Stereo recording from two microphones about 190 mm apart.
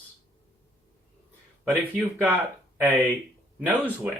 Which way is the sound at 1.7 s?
10° right (ahead or behind).